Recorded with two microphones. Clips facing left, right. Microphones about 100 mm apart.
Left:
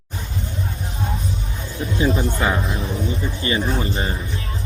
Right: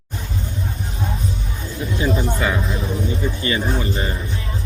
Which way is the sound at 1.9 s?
25° left (ahead or behind).